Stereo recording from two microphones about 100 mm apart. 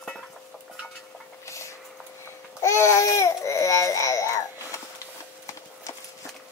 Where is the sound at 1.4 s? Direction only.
30° left (ahead or behind).